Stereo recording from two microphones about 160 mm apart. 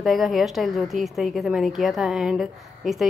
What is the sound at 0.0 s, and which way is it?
A woman's voice, centre (ahead or behind).